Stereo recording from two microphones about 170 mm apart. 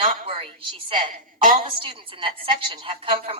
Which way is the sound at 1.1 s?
50° right (ahead or behind).